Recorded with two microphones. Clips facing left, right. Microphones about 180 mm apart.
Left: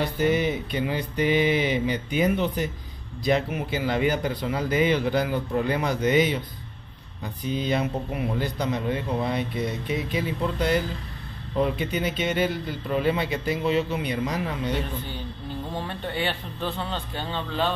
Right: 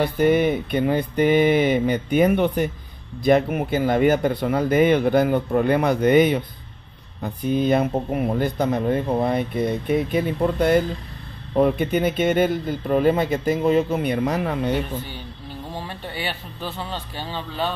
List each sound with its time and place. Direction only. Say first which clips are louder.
0.0 s speech: right 5 dB; 55° right (ahead or behind)
15.7 s a man's voice: left 1 dB; 10° right (ahead or behind)